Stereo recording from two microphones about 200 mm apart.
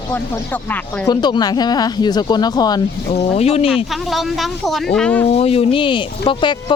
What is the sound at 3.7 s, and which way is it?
Speech, centre (ahead or behind).